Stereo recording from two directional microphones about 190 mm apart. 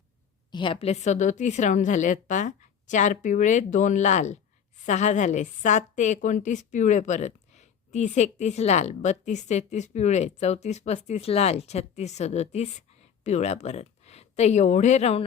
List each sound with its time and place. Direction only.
0.5 s a woman's voice: 25° left (ahead or behind)